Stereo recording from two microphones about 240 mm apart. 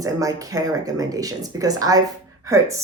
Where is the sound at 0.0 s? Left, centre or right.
Centre.